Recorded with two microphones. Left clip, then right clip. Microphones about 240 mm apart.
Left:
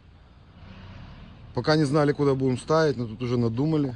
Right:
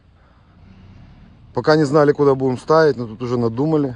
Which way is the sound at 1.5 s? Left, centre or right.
Right.